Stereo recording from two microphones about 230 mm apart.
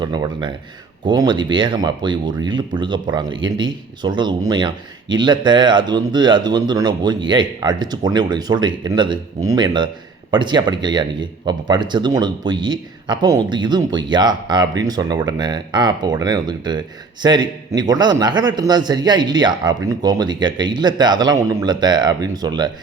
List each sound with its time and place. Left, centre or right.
0.0 s a man's voice: centre